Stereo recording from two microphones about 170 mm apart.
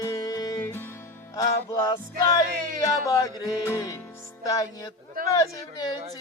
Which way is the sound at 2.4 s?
55° right (ahead or behind).